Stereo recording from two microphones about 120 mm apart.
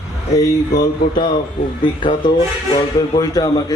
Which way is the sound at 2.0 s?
45° left (ahead or behind).